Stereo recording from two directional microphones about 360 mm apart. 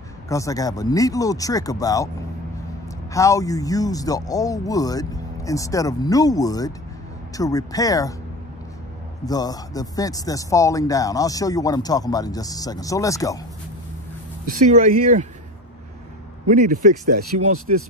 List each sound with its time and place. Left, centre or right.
0.3 s speech: centre
3.1 s speech: centre
9.2 s speech: centre
14.4 s speech: right
16.4 s speech: right